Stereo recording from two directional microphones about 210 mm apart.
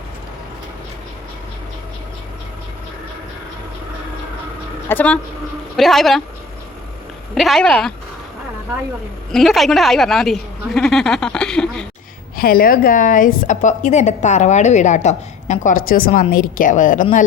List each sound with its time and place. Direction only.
4.9 s speech: 5° left (ahead or behind)
7.3 s speech: centre (ahead or behind)
9.3 s speech: centre (ahead or behind)
12.4 s a woman's voice: 45° left (ahead or behind)